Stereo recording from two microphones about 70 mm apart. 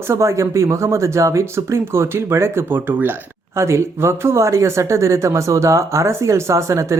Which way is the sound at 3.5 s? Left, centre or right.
Right.